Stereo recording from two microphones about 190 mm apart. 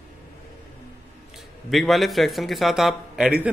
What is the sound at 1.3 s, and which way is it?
A man's voice, centre (ahead or behind).